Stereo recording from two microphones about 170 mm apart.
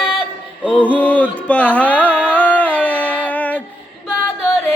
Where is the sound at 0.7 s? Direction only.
10° left (ahead or behind).